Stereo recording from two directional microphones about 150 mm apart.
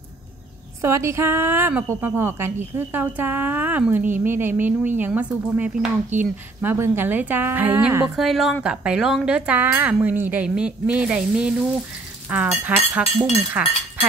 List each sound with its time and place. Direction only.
0.8 s a woman's voice: 20° right (ahead or behind)
8.2 s a woman's voice: centre (ahead or behind)